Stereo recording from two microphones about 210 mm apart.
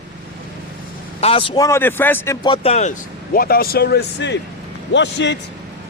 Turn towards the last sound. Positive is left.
turn(degrees=55)  # may be behind; listen again after turning